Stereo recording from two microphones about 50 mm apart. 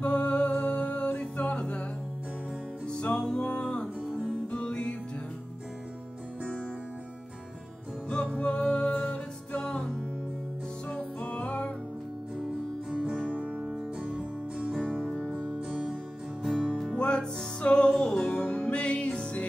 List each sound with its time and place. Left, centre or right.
0.0 s music: left
2.9 s music: centre
4.1 s music: right
4.5 s music: left
8.4 s music: left
8.9 s music: left
11.1 s music: left
12.9 s music: centre
13.6 s music: centre
14.0 s music: right
15.0 s music: centre
15.7 s music: centre
16.9 s music: centre